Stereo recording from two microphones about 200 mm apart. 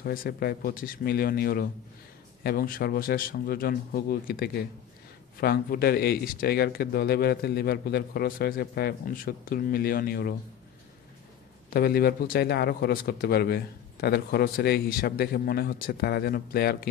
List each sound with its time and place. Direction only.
0.0 s speech: 45° left (ahead or behind)
11.7 s speech: 50° left (ahead or behind)